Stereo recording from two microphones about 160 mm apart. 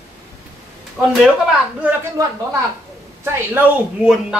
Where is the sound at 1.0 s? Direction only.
5° right (ahead or behind).